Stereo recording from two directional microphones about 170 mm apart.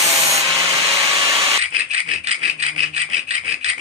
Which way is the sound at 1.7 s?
40° right (ahead or behind).